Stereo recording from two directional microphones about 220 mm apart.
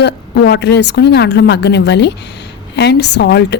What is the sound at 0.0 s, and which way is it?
Speech, 50° left (ahead or behind).